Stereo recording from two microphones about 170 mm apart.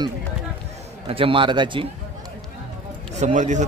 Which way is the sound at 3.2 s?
45° right (ahead or behind).